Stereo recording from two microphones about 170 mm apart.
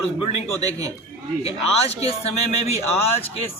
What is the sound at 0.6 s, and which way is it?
Speech, 20° right (ahead or behind).